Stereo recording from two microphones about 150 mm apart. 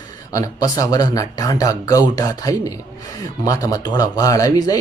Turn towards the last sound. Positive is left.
turn(degrees=25)  # may be behind; listen again after turning